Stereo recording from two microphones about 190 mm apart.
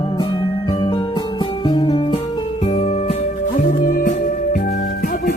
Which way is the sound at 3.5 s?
45° left (ahead or behind).